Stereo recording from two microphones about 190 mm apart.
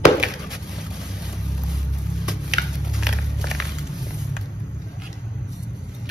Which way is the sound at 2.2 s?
5° right (ahead or behind).